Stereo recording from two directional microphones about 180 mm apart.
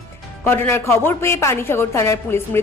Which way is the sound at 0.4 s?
15° left (ahead or behind).